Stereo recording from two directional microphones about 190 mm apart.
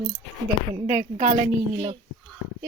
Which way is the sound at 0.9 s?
40° right (ahead or behind).